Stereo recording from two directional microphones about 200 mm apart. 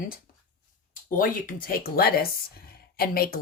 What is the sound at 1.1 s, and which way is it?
Speech, 45° left (ahead or behind).